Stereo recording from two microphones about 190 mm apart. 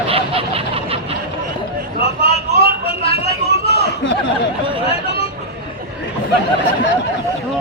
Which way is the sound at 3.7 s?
65° left (ahead or behind).